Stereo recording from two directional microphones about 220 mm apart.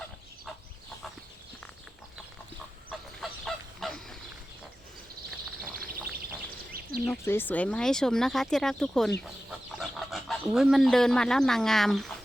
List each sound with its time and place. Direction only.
3.2 s goose: centre (ahead or behind)
7.0 s speech: 10° left (ahead or behind)